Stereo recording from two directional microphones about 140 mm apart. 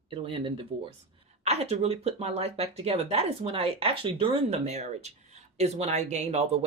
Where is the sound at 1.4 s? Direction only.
50° right (ahead or behind).